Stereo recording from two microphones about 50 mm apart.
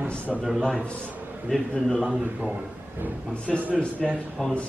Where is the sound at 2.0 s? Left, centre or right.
Centre.